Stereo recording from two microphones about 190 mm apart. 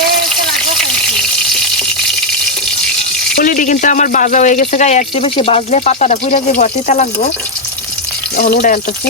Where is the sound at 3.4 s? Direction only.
45° left (ahead or behind).